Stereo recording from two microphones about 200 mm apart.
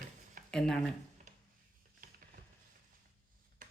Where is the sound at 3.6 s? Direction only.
40° right (ahead or behind).